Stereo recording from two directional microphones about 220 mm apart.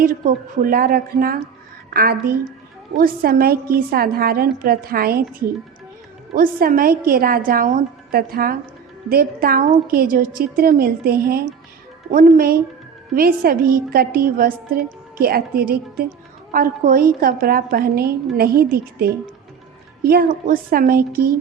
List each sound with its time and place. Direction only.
0.0 s a woman's voice: 40° right (ahead or behind)
6.3 s a woman's voice: 40° right (ahead or behind)